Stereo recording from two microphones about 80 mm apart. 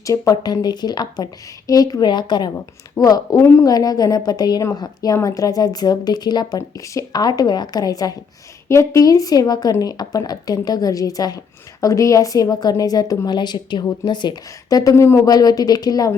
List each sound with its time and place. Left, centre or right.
0.1 s speech: left
3.0 s a woman's voice: left
3.7 s a woman's voice: left
6.6 s speech: left
8.7 s a woman's voice: left
15.0 s a woman's voice: left
15.3 s a woman's voice: left